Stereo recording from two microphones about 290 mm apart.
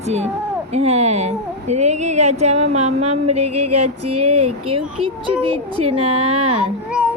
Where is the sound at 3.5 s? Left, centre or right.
Right.